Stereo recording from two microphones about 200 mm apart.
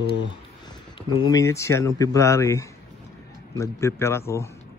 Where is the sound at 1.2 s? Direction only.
15° left (ahead or behind).